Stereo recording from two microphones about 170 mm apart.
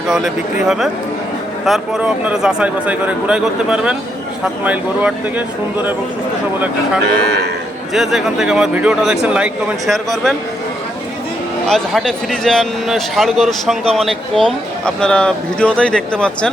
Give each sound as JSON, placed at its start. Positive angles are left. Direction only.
{"t": 1.6, "sound": "speech", "side_deg": 0}
{"t": 7.1, "sound": "speech", "side_deg": -85}
{"t": 7.9, "sound": "speech", "side_deg": 0}
{"t": 11.7, "sound": "speech", "side_deg": 0}